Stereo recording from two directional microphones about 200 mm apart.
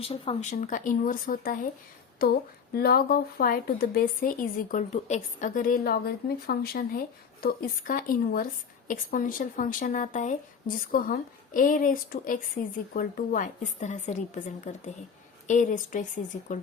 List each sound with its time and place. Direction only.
0.0 s speech: 30° left (ahead or behind)
0.5 s a woman's voice: 40° left (ahead or behind)